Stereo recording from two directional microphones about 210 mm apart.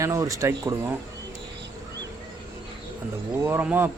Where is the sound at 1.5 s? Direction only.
55° right (ahead or behind).